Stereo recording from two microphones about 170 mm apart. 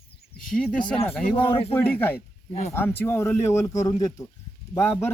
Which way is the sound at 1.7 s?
10° left (ahead or behind).